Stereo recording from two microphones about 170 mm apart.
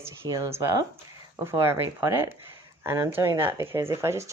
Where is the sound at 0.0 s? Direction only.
15° right (ahead or behind).